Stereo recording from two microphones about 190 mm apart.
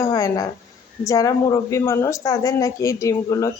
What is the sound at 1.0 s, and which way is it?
A man's voice, 20° left (ahead or behind).